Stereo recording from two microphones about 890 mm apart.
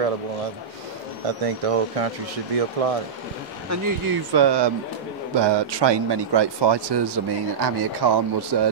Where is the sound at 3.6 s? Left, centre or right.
Right.